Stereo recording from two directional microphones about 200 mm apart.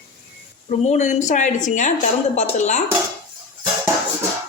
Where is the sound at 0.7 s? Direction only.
35° left (ahead or behind).